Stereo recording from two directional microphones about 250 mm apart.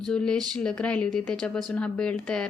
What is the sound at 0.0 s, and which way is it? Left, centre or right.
A woman's voice, centre.